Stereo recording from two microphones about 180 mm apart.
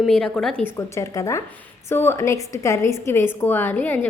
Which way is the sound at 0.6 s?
15° left (ahead or behind).